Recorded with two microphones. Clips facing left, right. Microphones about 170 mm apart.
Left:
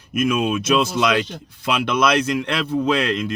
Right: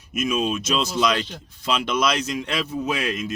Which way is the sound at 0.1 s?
55° left (ahead or behind).